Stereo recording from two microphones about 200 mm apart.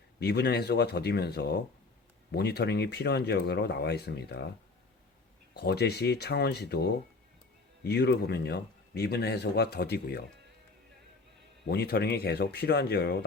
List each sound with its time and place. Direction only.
0.2 s speech: 55° left (ahead or behind)
5.5 s speech: 55° left (ahead or behind)
11.6 s speech: 55° left (ahead or behind)